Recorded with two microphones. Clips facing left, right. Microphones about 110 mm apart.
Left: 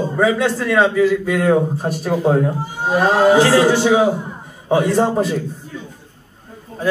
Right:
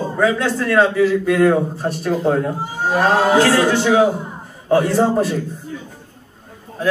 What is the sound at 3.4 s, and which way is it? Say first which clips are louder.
Speech: left 2 dB; 20° left (ahead or behind).